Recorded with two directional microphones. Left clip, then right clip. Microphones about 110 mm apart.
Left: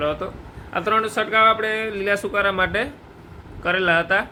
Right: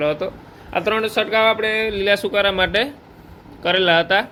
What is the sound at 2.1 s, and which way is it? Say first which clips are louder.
Speech: right 1 dB; 20° right (ahead or behind).